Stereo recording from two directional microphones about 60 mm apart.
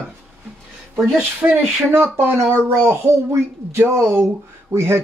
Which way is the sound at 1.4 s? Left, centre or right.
Right.